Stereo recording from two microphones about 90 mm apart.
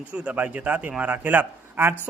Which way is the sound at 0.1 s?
15° right (ahead or behind).